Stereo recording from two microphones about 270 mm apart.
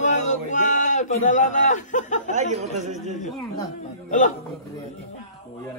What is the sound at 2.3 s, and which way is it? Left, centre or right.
Speech, right.